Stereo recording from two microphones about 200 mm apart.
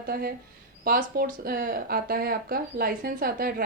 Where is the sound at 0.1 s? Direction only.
50° right (ahead or behind).